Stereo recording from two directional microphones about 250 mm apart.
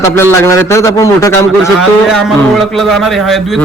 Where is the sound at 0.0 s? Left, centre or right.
Centre.